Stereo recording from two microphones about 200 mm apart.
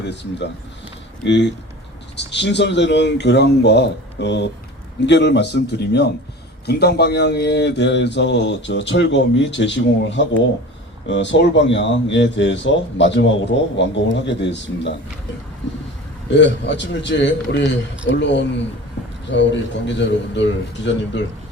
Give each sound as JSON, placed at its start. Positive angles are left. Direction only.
{"t": 1.2, "sound": "speech", "side_deg": 65}
{"t": 16.3, "sound": "speech", "side_deg": 60}